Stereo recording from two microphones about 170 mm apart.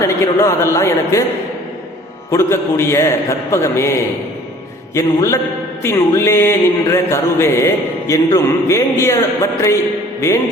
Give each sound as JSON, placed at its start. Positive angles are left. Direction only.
{"t": 0.0, "sound": "mantra", "side_deg": 15}
{"t": 2.3, "sound": "mantra", "side_deg": 15}
{"t": 4.9, "sound": "mantra", "side_deg": 15}
{"t": 10.2, "sound": "speech", "side_deg": 15}